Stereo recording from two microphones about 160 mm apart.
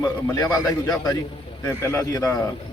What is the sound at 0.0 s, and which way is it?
A man's voice, 20° left (ahead or behind).